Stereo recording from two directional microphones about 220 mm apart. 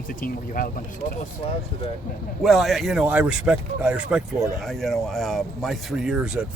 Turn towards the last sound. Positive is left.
turn(degrees=-5)  # may be behind; listen again after turning